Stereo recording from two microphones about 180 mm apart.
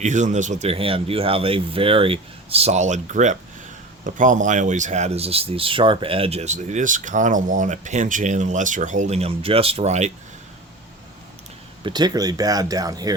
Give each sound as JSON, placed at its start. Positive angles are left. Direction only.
{"t": 0.0, "sound": "speech", "side_deg": -40}
{"t": 11.8, "sound": "speech", "side_deg": -25}